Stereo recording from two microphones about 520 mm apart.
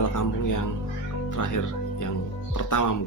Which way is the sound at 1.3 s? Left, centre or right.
Left.